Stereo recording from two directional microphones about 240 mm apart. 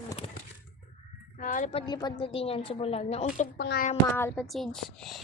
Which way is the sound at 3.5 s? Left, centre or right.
Left.